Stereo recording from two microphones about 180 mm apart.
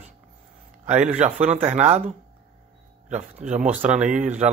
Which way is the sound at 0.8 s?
40° right (ahead or behind).